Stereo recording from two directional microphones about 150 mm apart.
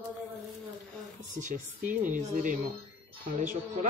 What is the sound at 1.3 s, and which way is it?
Speech, 55° right (ahead or behind).